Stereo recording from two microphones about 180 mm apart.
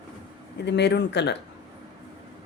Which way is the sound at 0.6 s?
70° left (ahead or behind).